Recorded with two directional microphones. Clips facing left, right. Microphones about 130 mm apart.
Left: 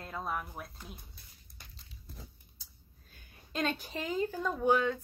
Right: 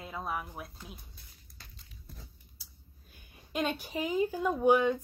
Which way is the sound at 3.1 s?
15° right (ahead or behind).